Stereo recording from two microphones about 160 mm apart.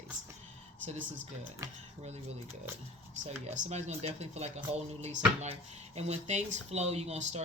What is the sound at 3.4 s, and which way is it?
Speech, 40° right (ahead or behind).